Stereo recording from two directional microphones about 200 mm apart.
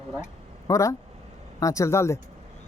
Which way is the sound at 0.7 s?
15° left (ahead or behind).